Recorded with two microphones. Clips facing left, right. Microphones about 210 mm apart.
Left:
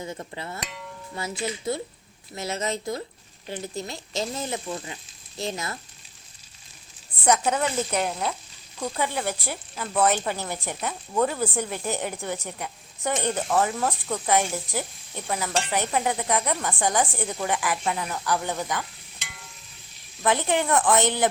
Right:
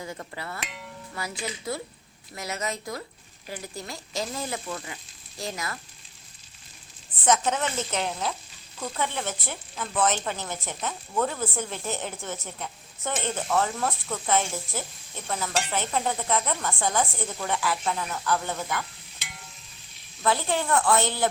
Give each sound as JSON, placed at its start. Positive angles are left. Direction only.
{"t": 0.0, "sound": "speech", "side_deg": 25}
{"t": 7.3, "sound": "a woman's voice", "side_deg": 10}
{"t": 20.2, "sound": "speech", "side_deg": 20}